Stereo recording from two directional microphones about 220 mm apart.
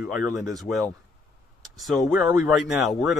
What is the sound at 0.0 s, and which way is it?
Speech, 5° right (ahead or behind).